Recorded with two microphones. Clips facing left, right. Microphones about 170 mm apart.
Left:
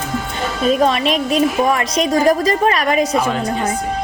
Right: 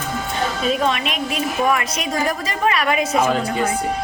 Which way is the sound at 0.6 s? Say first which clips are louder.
Left 7 dB; 40° left (ahead or behind).